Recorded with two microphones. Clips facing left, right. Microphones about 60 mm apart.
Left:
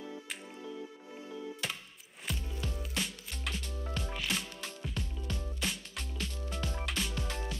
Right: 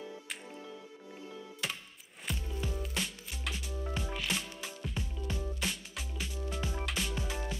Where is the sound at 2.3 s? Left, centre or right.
Centre.